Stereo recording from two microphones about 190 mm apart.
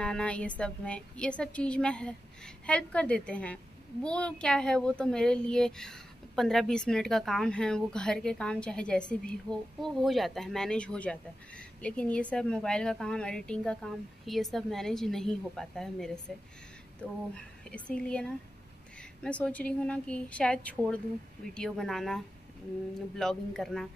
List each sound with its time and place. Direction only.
0.0 s a child's voice: 5° left (ahead or behind)